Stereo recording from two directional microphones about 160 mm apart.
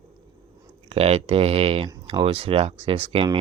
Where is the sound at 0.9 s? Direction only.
40° right (ahead or behind).